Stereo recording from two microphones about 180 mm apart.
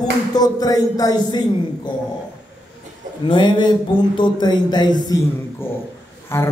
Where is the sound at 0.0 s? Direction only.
20° left (ahead or behind).